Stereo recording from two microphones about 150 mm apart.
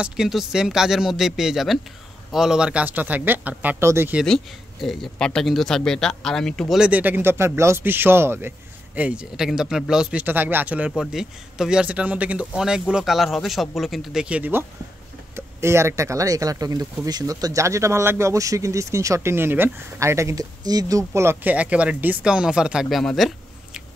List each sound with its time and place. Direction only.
0.0 s speech: 5° right (ahead or behind)
4.2 s speech: centre (ahead or behind)
6.8 s speech: 10° right (ahead or behind)